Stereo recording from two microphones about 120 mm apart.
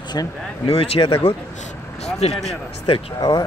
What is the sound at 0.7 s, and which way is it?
Speech, 50° left (ahead or behind).